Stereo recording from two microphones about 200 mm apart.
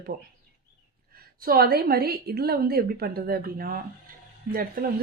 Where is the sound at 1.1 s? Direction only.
50° right (ahead or behind).